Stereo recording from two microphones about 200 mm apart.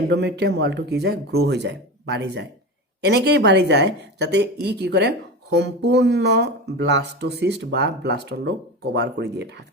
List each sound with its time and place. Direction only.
0.1 s speech: 55° right (ahead or behind)